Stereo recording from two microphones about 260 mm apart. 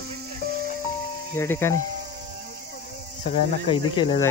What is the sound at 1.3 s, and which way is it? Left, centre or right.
Speech, centre.